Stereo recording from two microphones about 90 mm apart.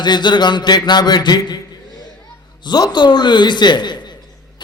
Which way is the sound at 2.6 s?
55° left (ahead or behind).